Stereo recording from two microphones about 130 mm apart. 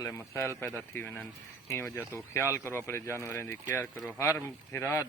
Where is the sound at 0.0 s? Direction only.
20° left (ahead or behind).